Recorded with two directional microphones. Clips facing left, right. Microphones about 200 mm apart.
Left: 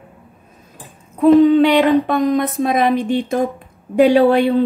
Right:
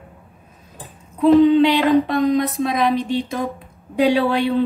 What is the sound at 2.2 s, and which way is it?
A woman's voice, 50° left (ahead or behind).